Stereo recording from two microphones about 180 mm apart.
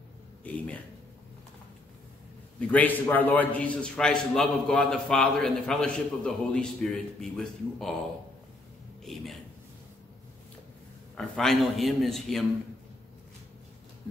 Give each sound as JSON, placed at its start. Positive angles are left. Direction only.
{"t": 0.4, "sound": "speech", "side_deg": 10}
{"t": 2.7, "sound": "a man's voice", "side_deg": 10}
{"t": 9.0, "sound": "a man's voice", "side_deg": 0}
{"t": 11.1, "sound": "a man's voice", "side_deg": 0}